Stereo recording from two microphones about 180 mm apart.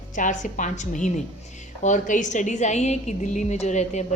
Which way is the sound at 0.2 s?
45° left (ahead or behind).